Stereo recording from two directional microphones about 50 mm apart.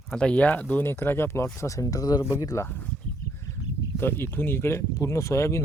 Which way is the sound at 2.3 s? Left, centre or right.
Left.